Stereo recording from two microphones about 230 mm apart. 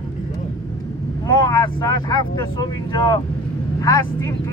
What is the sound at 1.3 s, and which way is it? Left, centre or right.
Speech, centre.